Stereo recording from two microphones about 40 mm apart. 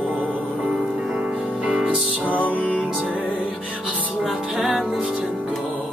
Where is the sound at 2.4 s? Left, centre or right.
Left.